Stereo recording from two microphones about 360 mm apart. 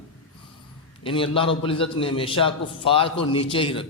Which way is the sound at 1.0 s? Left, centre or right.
Centre.